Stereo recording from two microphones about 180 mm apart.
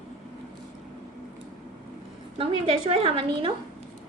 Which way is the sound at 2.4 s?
30° right (ahead or behind).